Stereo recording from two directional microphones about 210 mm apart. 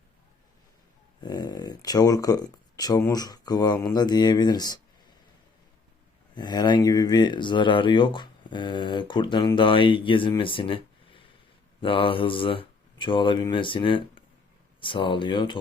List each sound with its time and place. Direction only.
1.2 s speech: 20° left (ahead or behind)
6.3 s speech: 20° left (ahead or behind)